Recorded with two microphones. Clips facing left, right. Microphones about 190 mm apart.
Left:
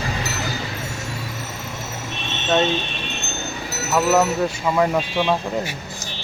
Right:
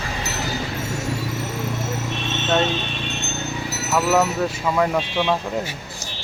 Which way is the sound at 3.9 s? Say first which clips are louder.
Left 1 dB; centre (ahead or behind).